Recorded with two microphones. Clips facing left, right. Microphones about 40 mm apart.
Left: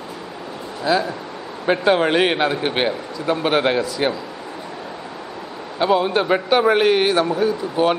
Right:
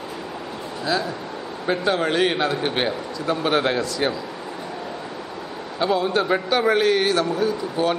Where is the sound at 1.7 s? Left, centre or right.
Left.